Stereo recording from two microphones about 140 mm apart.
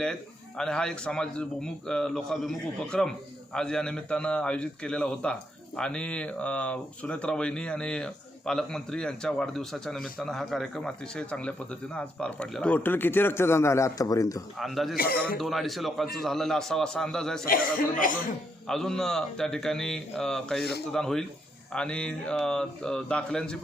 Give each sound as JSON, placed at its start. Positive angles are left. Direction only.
{"t": 0.0, "sound": "a man's voice", "side_deg": 5}
{"t": 14.6, "sound": "a man's voice", "side_deg": 0}
{"t": 14.9, "sound": "a man's voice", "side_deg": 90}
{"t": 15.4, "sound": "a man's voice", "side_deg": 0}
{"t": 17.4, "sound": "speech", "side_deg": 85}
{"t": 18.7, "sound": "a man's voice", "side_deg": 5}